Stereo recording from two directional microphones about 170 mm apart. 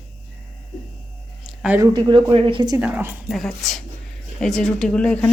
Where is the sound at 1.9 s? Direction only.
25° right (ahead or behind).